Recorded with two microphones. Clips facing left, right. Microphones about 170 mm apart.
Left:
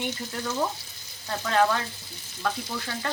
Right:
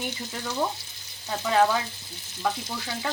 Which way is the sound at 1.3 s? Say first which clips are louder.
Right 1 dB; 5° right (ahead or behind).